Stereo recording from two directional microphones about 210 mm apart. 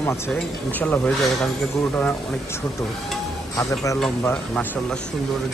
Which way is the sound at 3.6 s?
15° left (ahead or behind).